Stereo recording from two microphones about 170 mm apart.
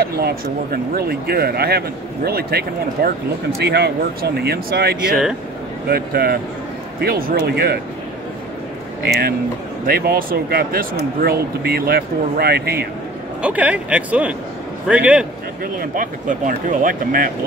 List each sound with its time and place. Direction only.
0.0 s speech: 65° right (ahead or behind)
3.5 s speech: 75° right (ahead or behind)
9.8 s speech: 65° right (ahead or behind)
13.4 s speech: 10° right (ahead or behind)
15.6 s speech: 55° right (ahead or behind)